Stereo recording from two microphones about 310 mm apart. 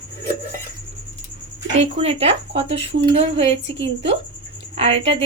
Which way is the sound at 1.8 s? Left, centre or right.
Centre.